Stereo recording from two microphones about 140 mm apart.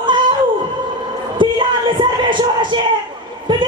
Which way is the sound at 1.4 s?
35° right (ahead or behind).